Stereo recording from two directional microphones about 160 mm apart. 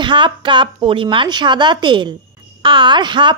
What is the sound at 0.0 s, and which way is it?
A woman's voice, 30° right (ahead or behind).